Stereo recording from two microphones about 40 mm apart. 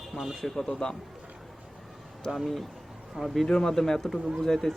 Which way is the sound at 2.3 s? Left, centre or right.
Centre.